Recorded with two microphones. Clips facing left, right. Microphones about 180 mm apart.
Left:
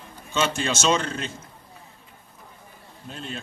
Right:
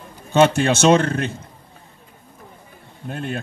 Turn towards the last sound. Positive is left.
turn(degrees=-60)  # may be behind; listen again after turning